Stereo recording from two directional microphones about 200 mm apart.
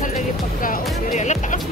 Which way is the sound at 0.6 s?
40° left (ahead or behind).